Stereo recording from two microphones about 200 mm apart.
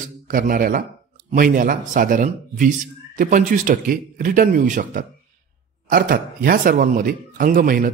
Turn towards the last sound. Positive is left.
turn(degrees=-45)  # may be behind; listen again after turning